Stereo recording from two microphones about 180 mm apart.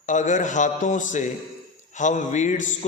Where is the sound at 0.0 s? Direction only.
45° left (ahead or behind).